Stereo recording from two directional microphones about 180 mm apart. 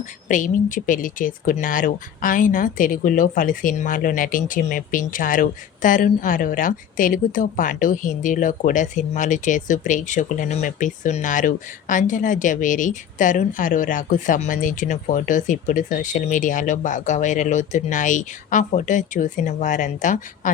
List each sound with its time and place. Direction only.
0.3 s speech: 45° left (ahead or behind)